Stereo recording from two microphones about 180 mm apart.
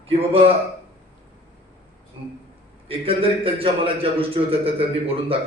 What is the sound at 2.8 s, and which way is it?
Speech, 30° right (ahead or behind).